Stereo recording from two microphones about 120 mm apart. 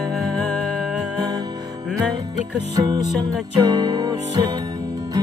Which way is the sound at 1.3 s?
35° right (ahead or behind).